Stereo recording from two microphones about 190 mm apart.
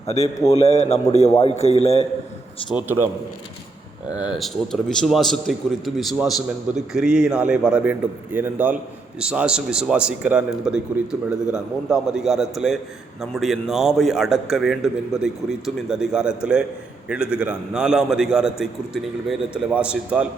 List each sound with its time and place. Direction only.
0.6 s a man's voice: 35° left (ahead or behind)
2.6 s a man's voice: 10° right (ahead or behind)
4.2 s a man's voice: centre (ahead or behind)